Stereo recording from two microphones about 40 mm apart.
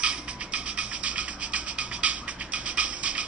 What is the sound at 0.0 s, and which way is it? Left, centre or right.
Music, right.